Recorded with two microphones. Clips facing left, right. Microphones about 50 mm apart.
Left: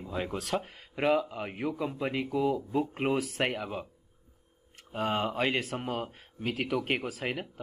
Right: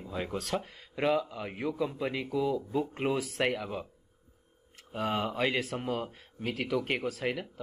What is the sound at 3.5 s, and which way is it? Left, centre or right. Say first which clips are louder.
Speech: even; centre.